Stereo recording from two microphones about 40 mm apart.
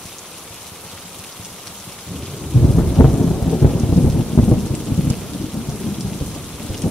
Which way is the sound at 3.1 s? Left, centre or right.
Centre.